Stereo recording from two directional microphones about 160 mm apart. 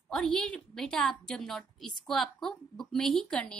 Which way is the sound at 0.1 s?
5° left (ahead or behind).